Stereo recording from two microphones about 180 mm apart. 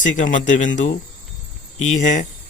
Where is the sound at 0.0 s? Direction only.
45° left (ahead or behind).